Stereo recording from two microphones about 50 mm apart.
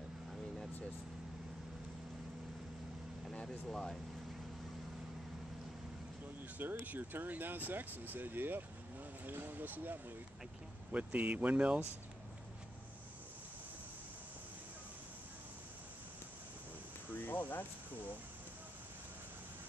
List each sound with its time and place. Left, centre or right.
3.6 s speech: centre
6.6 s speech: right
9.2 s a sound: right
10.9 s speech: right
17.1 s speech: left